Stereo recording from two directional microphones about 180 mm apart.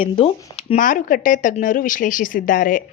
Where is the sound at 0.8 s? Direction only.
50° left (ahead or behind).